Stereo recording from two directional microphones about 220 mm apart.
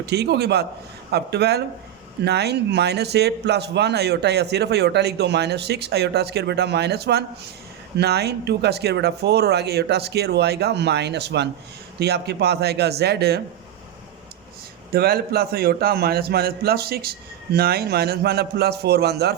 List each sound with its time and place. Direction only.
0.0 s a man's voice: 50° right (ahead or behind)
14.9 s a man's voice: 45° right (ahead or behind)